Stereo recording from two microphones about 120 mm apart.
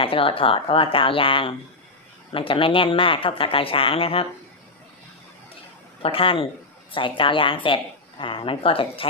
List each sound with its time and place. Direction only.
0.0 s speech: 50° left (ahead or behind)
6.0 s speech: 50° left (ahead or behind)